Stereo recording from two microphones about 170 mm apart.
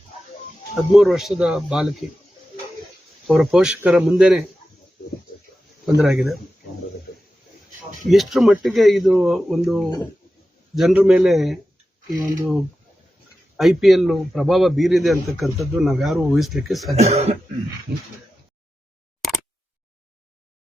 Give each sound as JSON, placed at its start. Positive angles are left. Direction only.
{"t": 0.8, "sound": "a man's voice", "side_deg": 0}
{"t": 3.2, "sound": "a man's voice", "side_deg": 0}
{"t": 5.8, "sound": "a man's voice", "side_deg": 0}
{"t": 7.1, "sound": "a sound", "side_deg": 65}
{"t": 8.1, "sound": "a man's voice", "side_deg": 0}
{"t": 13.6, "sound": "a man's voice", "side_deg": 0}
{"t": 17.0, "sound": "speech", "side_deg": -40}